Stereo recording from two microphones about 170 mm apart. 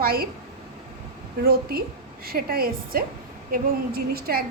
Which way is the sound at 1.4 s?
60° right (ahead or behind).